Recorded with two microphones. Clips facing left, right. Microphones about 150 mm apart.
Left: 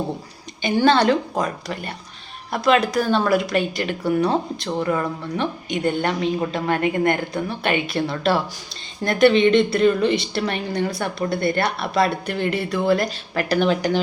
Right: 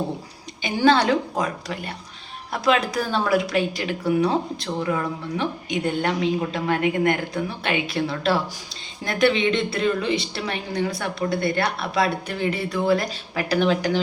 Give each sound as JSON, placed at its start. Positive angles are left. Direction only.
{"t": 0.6, "sound": "speech", "side_deg": -5}
{"t": 2.9, "sound": "speech", "side_deg": -5}
{"t": 7.6, "sound": "a woman's voice", "side_deg": 55}
{"t": 7.9, "sound": "speech", "side_deg": -5}
{"t": 9.0, "sound": "a woman's voice", "side_deg": 55}
{"t": 9.6, "sound": "speech", "side_deg": -5}